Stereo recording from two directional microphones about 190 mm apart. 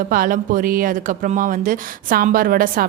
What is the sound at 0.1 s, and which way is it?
Speech, 45° right (ahead or behind).